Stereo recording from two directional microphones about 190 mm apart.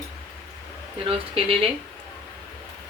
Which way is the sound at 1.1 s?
30° right (ahead or behind).